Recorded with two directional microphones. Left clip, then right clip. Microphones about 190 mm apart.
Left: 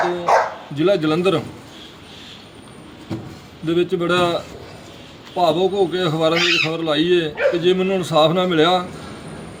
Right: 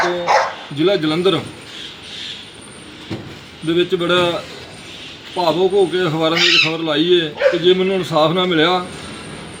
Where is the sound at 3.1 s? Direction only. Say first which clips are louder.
Right 1 dB; 65° left (ahead or behind).